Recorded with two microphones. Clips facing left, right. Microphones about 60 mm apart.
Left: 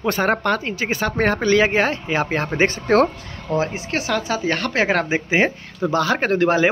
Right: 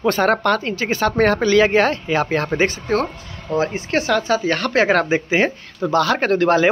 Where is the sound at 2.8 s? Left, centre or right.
Left.